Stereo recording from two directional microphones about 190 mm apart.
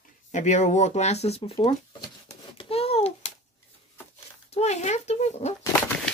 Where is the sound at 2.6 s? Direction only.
30° left (ahead or behind).